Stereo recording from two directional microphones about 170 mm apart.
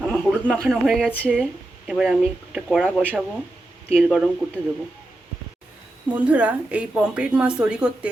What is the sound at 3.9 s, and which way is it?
Speech, 5° right (ahead or behind).